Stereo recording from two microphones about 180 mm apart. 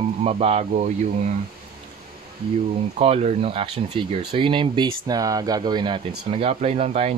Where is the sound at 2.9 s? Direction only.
35° right (ahead or behind).